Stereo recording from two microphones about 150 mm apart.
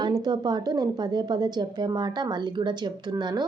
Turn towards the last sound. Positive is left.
turn(degrees=-25)  # may be behind; listen again after turning